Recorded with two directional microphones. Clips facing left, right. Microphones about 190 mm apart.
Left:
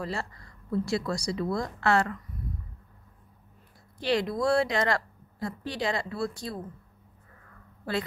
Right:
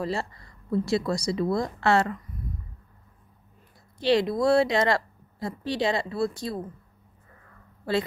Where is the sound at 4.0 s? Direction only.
25° right (ahead or behind).